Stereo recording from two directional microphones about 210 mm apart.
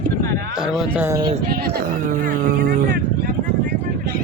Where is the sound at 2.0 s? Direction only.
45° right (ahead or behind).